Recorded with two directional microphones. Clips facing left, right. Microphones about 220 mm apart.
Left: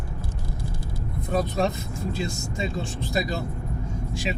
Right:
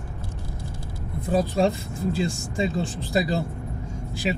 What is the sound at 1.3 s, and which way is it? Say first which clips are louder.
Speech: right 3 dB; 30° right (ahead or behind).